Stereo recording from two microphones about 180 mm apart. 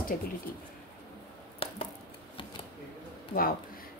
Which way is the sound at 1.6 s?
30° left (ahead or behind).